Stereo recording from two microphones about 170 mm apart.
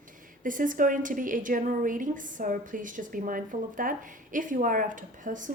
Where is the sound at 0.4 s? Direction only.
50° right (ahead or behind).